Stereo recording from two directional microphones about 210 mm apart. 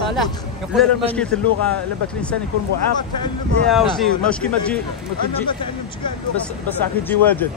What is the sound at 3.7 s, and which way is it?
Speech, centre (ahead or behind).